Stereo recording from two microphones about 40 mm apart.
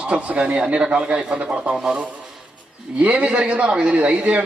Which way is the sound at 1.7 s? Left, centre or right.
Centre.